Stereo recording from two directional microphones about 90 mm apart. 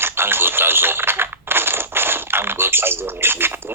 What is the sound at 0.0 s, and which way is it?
Radio, 25° right (ahead or behind).